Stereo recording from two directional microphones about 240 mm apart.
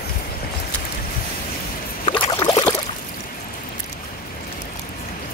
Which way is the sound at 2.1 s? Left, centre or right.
Centre.